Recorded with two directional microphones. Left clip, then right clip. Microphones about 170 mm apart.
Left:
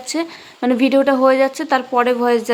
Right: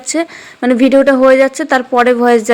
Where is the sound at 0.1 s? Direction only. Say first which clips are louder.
Right 6 dB; 15° right (ahead or behind).